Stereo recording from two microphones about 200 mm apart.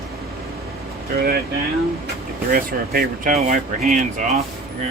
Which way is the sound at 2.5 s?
45° right (ahead or behind).